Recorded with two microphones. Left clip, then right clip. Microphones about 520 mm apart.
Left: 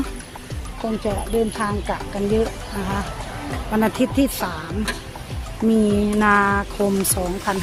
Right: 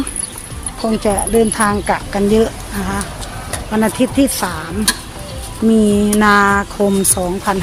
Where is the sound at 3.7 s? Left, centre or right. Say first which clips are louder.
Right 5 dB; left.